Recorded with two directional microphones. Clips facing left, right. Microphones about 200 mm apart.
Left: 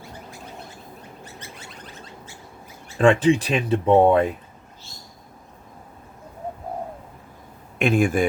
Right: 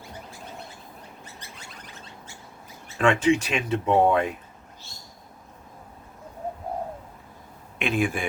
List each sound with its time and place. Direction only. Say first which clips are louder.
3.0 s speech: left 4 dB; 35° left (ahead or behind)
7.8 s speech: left 6 dB; 45° left (ahead or behind)